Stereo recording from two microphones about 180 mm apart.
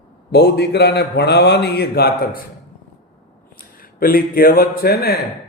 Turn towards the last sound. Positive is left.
turn(degrees=60)  # may be behind; listen again after turning